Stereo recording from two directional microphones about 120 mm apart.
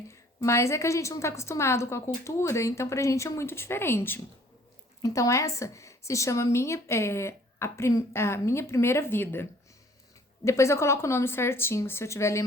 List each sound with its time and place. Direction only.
0.4 s a woman's voice: 25° left (ahead or behind)